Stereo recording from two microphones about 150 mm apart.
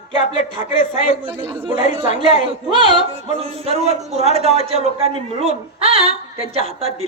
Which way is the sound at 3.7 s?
45° right (ahead or behind).